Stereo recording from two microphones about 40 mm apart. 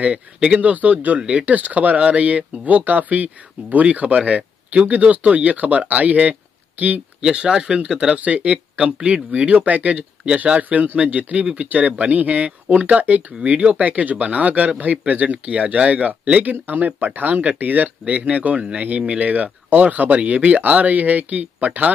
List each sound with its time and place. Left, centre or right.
0.0 s speech: right
0.6 s speech: right
6.8 s speech: right
7.2 s speech: right
8.2 s speech: right
8.7 s speech: right
15.2 s speech: right